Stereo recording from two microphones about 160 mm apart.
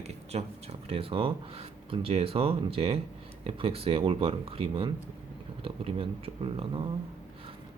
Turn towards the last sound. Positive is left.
turn(degrees=-35)  # may be behind; listen again after turning